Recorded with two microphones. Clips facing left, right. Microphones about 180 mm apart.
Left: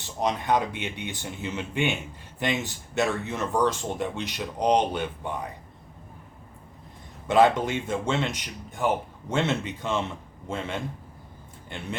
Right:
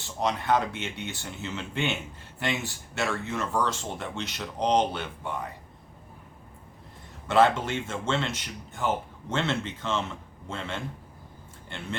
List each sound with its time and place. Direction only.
0.0 s speech: 15° left (ahead or behind)
7.3 s speech: 15° left (ahead or behind)